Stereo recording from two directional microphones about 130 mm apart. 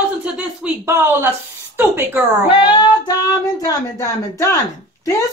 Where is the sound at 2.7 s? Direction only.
35° left (ahead or behind).